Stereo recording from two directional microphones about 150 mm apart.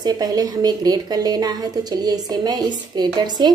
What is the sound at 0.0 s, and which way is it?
A woman's voice, 25° right (ahead or behind).